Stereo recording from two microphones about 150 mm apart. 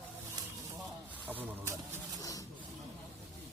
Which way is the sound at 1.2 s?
10° right (ahead or behind).